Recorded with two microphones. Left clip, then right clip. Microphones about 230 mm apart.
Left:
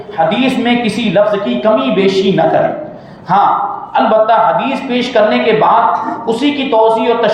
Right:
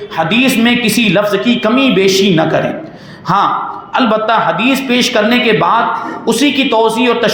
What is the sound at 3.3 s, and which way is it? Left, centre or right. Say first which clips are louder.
Speech: left 2 dB; right.